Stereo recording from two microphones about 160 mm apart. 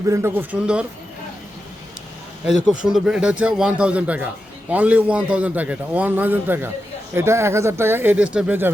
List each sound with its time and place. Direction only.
0.1 s a man's voice: 15° right (ahead or behind)
2.6 s a man's voice: 5° right (ahead or behind)